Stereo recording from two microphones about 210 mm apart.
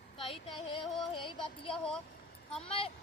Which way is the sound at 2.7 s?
25° left (ahead or behind).